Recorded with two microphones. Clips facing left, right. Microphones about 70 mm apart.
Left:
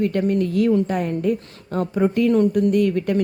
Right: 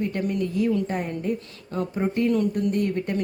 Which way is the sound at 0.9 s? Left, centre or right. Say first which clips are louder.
Left 6 dB; left.